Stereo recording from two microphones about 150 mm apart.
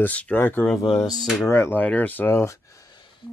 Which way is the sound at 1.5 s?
15° left (ahead or behind).